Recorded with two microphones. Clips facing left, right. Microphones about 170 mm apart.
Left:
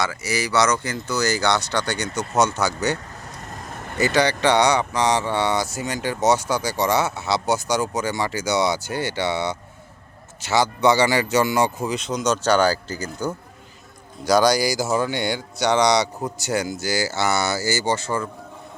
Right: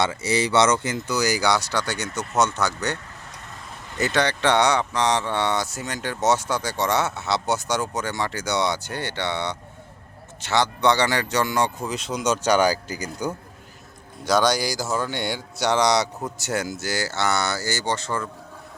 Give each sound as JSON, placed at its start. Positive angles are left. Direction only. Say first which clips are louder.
{"t": 0.0, "sound": "speech", "louder": "right 2 dB", "side_deg": -30}
{"t": 3.5, "sound": "vehicle", "louder": "left 7 dB", "side_deg": 45}
{"t": 4.0, "sound": "speech", "louder": "left 3 dB", "side_deg": 0}
{"t": 11.9, "sound": "speech", "louder": "even", "side_deg": -5}
{"t": 14.3, "sound": "speech", "louder": "left 3 dB", "side_deg": 0}